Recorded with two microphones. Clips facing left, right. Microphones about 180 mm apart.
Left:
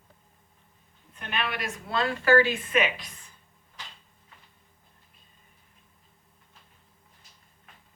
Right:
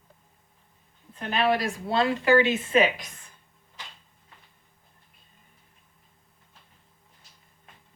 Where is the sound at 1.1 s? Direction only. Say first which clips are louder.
Right 9 dB; 35° right (ahead or behind).